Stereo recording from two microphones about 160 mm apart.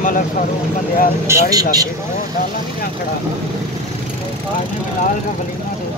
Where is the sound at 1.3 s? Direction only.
20° right (ahead or behind).